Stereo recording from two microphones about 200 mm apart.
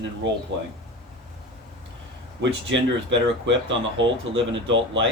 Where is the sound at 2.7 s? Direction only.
65° right (ahead or behind).